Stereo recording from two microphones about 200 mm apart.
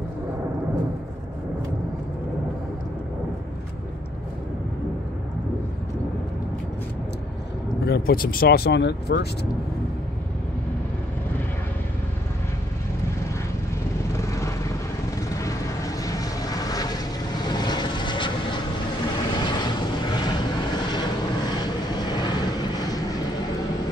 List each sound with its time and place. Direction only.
7.8 s speech: 50° left (ahead or behind)
14.1 s vehicle: 15° left (ahead or behind)